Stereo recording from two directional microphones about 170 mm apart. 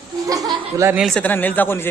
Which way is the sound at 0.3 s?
20° right (ahead or behind).